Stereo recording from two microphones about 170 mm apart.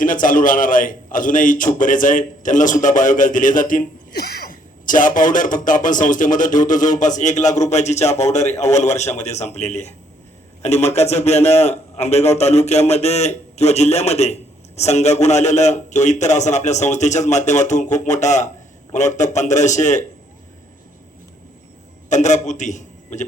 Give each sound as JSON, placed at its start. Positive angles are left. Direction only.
{"t": 0.0, "sound": "a man's voice", "side_deg": 50}
{"t": 22.1, "sound": "a man's voice", "side_deg": 45}